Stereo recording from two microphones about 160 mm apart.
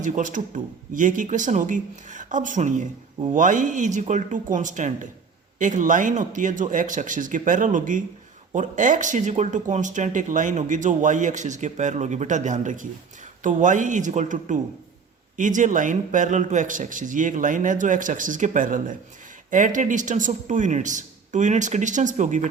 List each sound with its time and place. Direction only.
0.0 s speech: 55° right (ahead or behind)